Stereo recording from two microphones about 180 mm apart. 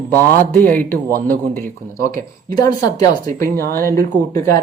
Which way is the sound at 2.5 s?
20° left (ahead or behind).